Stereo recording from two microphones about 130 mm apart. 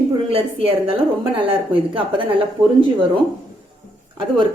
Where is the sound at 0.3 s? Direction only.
45° right (ahead or behind).